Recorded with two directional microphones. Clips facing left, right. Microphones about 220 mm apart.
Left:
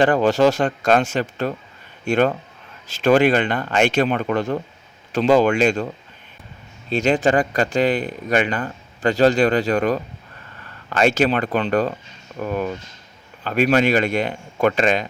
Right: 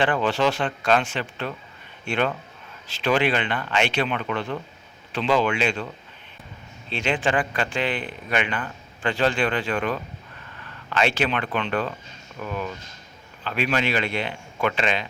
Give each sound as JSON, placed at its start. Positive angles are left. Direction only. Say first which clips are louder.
{"t": 0.0, "sound": "speech", "louder": "left 7 dB", "side_deg": 40}
{"t": 6.9, "sound": "speech", "louder": "left 7 dB", "side_deg": 40}